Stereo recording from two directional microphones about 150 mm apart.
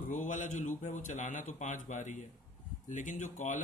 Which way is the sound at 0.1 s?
55° left (ahead or behind).